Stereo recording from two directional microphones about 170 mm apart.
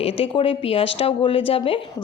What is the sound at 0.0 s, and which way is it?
A woman's voice, 35° left (ahead or behind).